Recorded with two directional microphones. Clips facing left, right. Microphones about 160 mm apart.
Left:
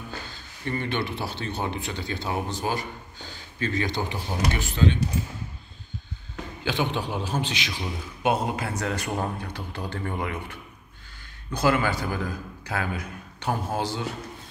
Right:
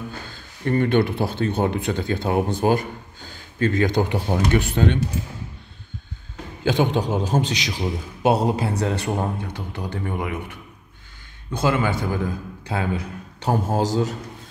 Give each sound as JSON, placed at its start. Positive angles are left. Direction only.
{"t": 0.3, "sound": "speech", "side_deg": -50}
{"t": 6.6, "sound": "a man's voice", "side_deg": -45}
{"t": 11.5, "sound": "a man's voice", "side_deg": -20}